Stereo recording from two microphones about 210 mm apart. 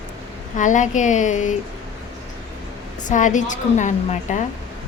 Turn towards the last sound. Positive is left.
turn(degrees=35)  # may be behind; listen again after turning